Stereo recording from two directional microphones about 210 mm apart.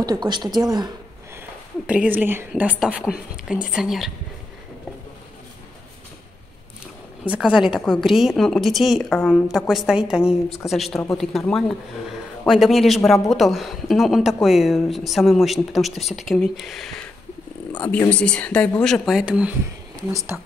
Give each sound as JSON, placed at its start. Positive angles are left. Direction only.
{"t": 0.0, "sound": "a woman's voice", "side_deg": -20}
{"t": 7.2, "sound": "speech", "side_deg": -5}
{"t": 20.1, "sound": "speech", "side_deg": -15}